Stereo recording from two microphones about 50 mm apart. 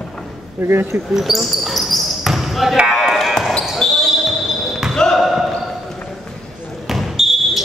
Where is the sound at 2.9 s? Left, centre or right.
Centre.